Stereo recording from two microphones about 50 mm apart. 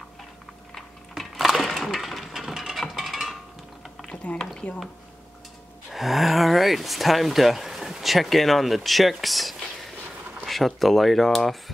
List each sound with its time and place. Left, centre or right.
0.7 s sewing machine: centre
4.1 s a sound: left
5.9 s speech: centre